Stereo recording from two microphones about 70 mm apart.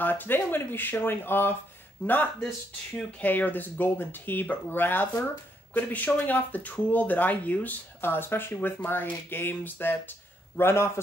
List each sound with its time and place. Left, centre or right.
0.0 s speech: left
3.2 s a man's voice: left